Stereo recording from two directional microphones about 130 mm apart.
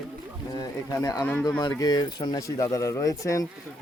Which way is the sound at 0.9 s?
30° left (ahead or behind).